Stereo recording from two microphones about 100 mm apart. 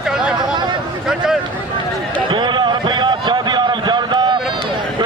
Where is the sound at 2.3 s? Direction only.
50° right (ahead or behind).